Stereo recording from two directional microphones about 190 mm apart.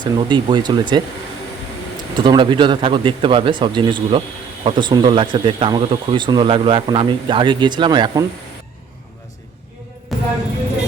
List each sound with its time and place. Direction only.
0.2 s speech: 25° right (ahead or behind)
2.1 s speech: 25° right (ahead or behind)
10.1 s a sound: centre (ahead or behind)